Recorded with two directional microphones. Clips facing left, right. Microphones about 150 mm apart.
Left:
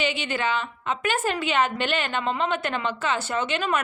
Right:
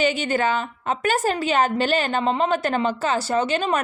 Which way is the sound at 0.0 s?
45° right (ahead or behind).